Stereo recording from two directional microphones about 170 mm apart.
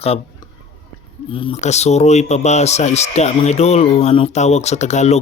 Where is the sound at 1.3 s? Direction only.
35° left (ahead or behind).